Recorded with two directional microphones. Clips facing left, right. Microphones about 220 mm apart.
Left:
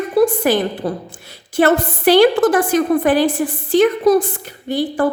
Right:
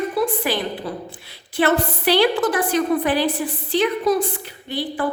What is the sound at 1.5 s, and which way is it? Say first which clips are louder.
A woman's voice: left 4 dB; 45° left (ahead or behind).